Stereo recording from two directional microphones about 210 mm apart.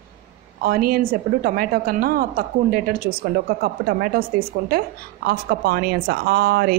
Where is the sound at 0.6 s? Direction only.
45° right (ahead or behind).